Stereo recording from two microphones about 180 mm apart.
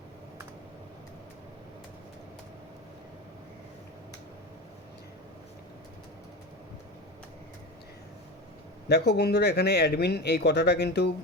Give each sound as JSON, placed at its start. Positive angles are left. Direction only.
{"t": 8.9, "sound": "speech", "side_deg": 65}